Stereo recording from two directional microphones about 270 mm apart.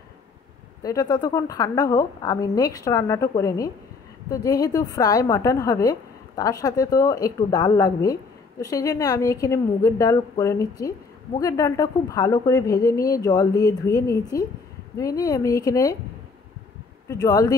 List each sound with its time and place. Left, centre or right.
0.8 s a woman's voice: centre
17.1 s a woman's voice: centre